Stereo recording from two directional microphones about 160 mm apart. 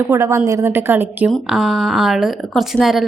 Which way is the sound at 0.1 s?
15° right (ahead or behind).